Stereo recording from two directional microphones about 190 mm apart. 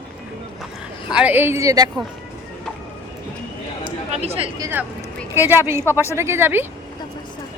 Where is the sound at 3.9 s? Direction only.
30° right (ahead or behind).